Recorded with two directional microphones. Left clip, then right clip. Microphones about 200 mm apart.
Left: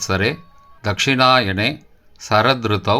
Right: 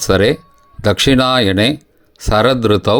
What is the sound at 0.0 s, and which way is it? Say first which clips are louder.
Speech: right 7 dB; 40° right (ahead or behind).